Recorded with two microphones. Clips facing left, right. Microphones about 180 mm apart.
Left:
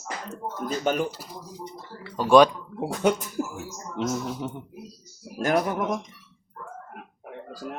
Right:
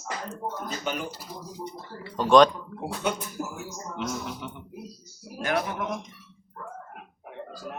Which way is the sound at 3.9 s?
40° left (ahead or behind).